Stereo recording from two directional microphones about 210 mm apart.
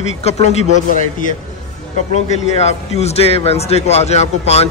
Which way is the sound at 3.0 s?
30° left (ahead or behind).